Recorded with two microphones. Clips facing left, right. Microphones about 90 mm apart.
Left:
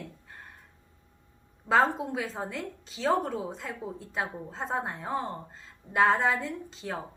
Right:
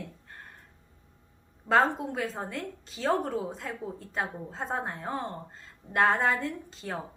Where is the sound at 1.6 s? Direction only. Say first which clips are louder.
Even; centre (ahead or behind).